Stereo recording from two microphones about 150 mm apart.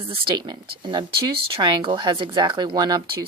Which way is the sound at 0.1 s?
30° right (ahead or behind).